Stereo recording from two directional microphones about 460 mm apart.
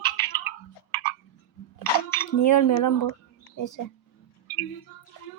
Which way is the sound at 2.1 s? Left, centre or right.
Left.